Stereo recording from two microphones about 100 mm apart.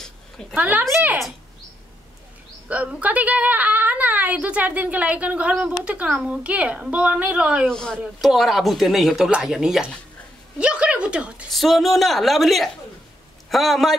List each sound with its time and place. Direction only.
0.6 s a woman's voice: 15° right (ahead or behind)
2.7 s a woman's voice: 15° right (ahead or behind)
7.6 s speech: 5° left (ahead or behind)
10.6 s a sound: 10° right (ahead or behind)
11.5 s speech: centre (ahead or behind)